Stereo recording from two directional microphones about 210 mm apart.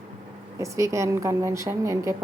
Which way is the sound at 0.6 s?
15° right (ahead or behind).